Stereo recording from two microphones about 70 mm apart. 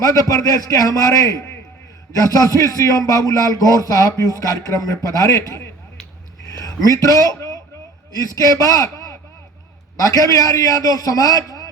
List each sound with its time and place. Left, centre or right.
0.3 s a man's voice: left
6.5 s a sound: left
6.8 s a man's voice: left
10.0 s a man's voice: left